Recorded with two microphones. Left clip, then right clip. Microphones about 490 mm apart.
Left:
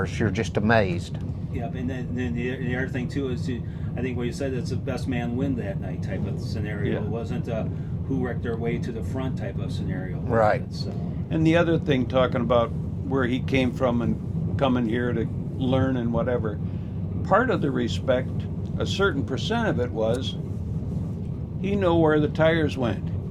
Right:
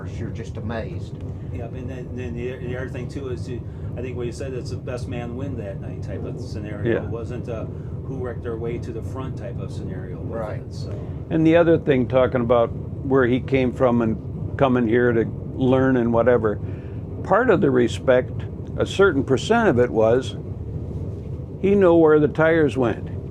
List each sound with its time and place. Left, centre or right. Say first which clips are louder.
0.0 s speech: left 8 dB; left
2.1 s speech: even; centre
4.0 s speech: left 1 dB; centre
10.3 s speech: left 10 dB; left
11.3 s speech: right 6 dB; right
21.6 s speech: right 7 dB; right